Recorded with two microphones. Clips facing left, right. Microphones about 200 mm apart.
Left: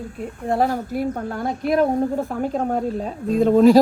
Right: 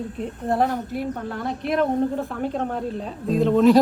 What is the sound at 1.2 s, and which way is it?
Speech, 45° left (ahead or behind).